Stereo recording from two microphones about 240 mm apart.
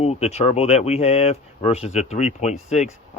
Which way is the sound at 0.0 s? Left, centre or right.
Left.